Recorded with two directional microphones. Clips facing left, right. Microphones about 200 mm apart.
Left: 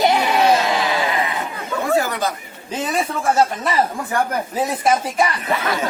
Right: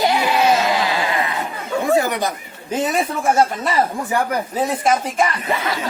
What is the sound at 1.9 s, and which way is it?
Chatter, 20° right (ahead or behind).